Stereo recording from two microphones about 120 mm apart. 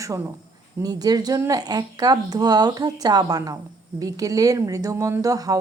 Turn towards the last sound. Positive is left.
turn(degrees=-30)  # may be behind; listen again after turning